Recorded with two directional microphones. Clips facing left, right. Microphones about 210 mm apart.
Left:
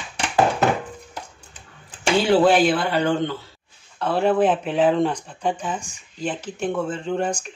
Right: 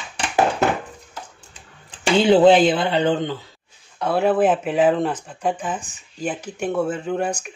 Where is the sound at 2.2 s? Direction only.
20° right (ahead or behind).